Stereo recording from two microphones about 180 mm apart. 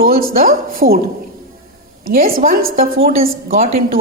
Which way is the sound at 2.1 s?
55° right (ahead or behind).